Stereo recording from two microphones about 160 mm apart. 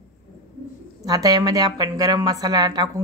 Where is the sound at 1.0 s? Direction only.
25° right (ahead or behind).